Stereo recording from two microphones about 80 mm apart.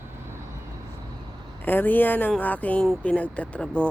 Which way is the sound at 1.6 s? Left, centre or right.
Left.